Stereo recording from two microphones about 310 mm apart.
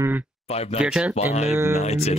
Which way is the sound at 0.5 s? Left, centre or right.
Centre.